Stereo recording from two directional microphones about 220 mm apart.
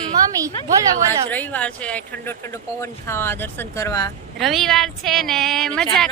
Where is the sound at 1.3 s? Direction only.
5° left (ahead or behind).